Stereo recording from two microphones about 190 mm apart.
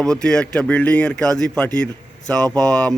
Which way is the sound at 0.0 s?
5° left (ahead or behind).